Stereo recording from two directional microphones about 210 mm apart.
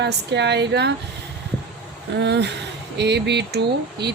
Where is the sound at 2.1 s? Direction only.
55° right (ahead or behind).